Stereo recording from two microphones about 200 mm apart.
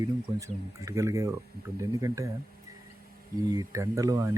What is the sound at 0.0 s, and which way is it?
Speech, 15° right (ahead or behind).